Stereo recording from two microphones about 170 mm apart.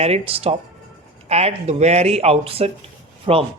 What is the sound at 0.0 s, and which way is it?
Speech, 35° right (ahead or behind).